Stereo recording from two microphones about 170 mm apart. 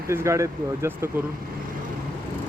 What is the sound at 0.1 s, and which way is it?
Speech, 15° right (ahead or behind).